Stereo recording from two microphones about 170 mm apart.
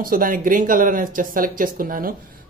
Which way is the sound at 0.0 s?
55° right (ahead or behind).